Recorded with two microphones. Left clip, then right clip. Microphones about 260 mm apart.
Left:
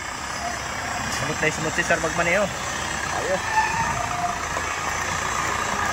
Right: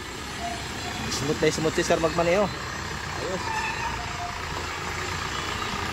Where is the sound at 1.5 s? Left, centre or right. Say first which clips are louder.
Left 1 dB; centre.